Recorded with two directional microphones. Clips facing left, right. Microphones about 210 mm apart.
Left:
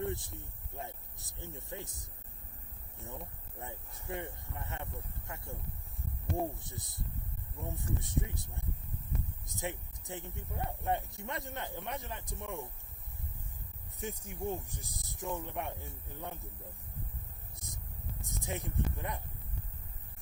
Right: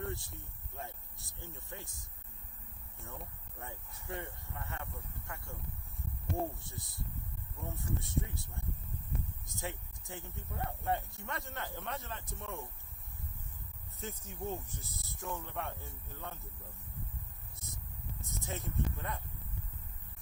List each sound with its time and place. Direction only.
0.0 s speech: 20° left (ahead or behind)
3.0 s speech: 15° left (ahead or behind)
6.6 s speech: 20° left (ahead or behind)
14.0 s speech: 15° left (ahead or behind)
17.6 s a sound: 15° left (ahead or behind)
18.3 s speech: 15° left (ahead or behind)